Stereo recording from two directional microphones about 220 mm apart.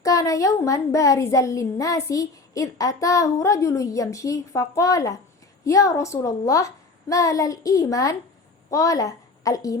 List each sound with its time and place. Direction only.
0.0 s a woman's voice: 15° left (ahead or behind)